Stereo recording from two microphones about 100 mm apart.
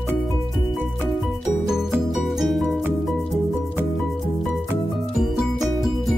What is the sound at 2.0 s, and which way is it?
Music, centre (ahead or behind).